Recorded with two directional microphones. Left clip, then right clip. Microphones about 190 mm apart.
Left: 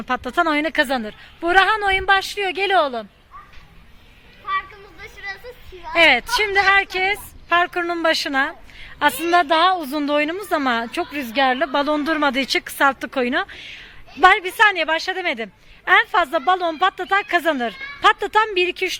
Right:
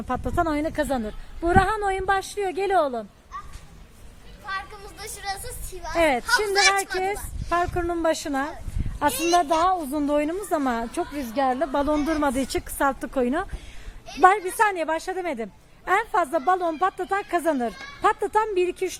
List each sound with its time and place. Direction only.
0.1 s a woman's voice: 5° left (ahead or behind)
4.9 s music: 65° right (ahead or behind)
5.9 s a woman's voice: centre (ahead or behind)
9.1 s a woman's voice: 15° left (ahead or behind)
11.3 s speech: 15° left (ahead or behind)
11.7 s a woman's voice: centre (ahead or behind)
16.8 s a woman's voice: 5° left (ahead or behind)